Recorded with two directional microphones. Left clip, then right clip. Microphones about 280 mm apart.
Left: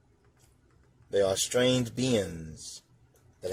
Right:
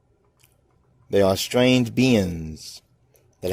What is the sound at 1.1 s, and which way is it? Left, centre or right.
Speech, right.